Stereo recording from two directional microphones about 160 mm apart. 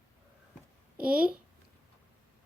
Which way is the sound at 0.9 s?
10° right (ahead or behind).